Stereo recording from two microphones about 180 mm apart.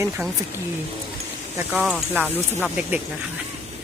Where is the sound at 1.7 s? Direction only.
10° right (ahead or behind).